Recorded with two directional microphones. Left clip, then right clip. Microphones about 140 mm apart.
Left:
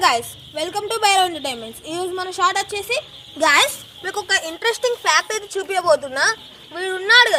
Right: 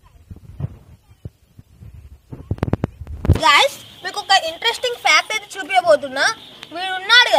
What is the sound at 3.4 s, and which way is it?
Speech, 30° left (ahead or behind).